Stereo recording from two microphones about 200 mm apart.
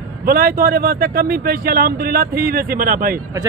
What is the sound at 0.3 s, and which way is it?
Speech, 45° right (ahead or behind).